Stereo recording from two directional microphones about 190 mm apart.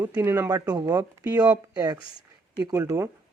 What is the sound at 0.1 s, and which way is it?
Speech, 15° right (ahead or behind).